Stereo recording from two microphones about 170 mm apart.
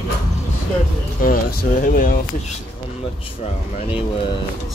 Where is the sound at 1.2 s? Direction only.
55° left (ahead or behind).